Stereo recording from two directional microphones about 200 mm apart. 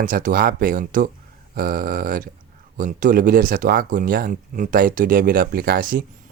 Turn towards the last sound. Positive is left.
turn(degrees=-45)  # may be behind; listen again after turning